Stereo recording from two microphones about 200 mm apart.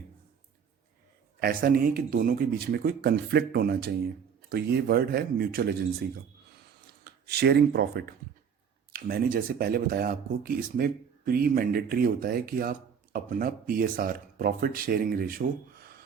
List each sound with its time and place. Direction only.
1.4 s speech: 45° right (ahead or behind)